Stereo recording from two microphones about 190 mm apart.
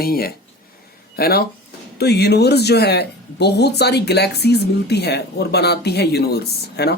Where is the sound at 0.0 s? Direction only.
50° left (ahead or behind).